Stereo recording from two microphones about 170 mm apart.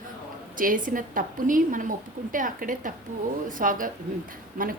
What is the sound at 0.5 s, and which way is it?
A woman's voice, 55° right (ahead or behind).